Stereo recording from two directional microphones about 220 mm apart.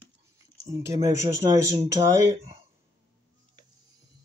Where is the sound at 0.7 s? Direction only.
15° right (ahead or behind).